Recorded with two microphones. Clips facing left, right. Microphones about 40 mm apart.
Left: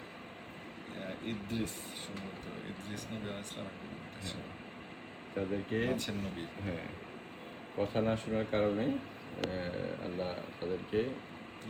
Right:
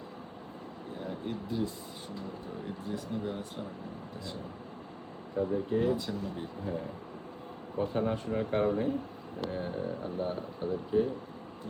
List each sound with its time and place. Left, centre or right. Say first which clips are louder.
0.9 s speech: right 3 dB; left
5.4 s speech: right 5 dB; left
9.4 s vehicle: right 2 dB; left
10.1 s speech: right 3 dB; left